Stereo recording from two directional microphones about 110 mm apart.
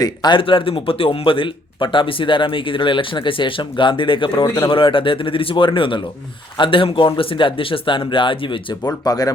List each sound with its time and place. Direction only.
0.0 s speech: 40° left (ahead or behind)
8.8 s speech: 35° left (ahead or behind)